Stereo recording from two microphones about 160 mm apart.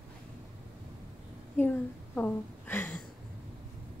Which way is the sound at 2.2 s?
10° left (ahead or behind).